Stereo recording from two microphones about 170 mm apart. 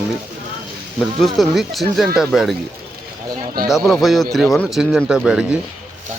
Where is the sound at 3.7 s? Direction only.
Centre (ahead or behind).